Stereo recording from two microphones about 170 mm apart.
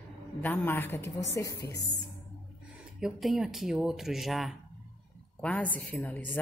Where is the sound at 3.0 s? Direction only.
Centre (ahead or behind).